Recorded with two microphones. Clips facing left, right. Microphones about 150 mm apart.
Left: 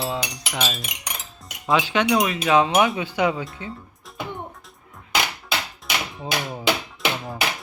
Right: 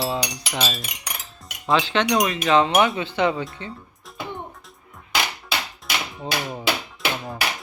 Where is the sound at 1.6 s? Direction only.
5° left (ahead or behind).